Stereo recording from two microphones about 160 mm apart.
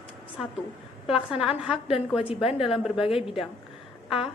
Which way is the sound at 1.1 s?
5° right (ahead or behind).